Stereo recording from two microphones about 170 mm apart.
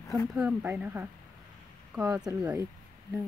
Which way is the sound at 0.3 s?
10° right (ahead or behind).